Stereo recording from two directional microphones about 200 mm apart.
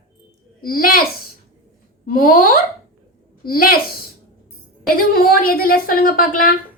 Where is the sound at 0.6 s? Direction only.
45° left (ahead or behind).